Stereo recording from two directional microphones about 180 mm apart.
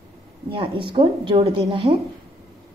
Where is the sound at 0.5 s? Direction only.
30° right (ahead or behind).